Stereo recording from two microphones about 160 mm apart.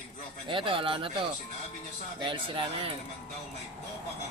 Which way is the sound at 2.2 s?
30° right (ahead or behind).